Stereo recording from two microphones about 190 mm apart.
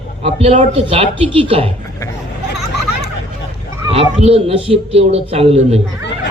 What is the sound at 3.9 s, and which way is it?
Speech, 30° right (ahead or behind).